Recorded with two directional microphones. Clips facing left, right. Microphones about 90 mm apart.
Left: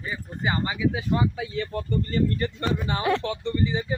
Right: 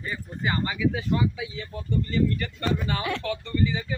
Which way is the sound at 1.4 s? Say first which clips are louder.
Left 6 dB; 60° left (ahead or behind).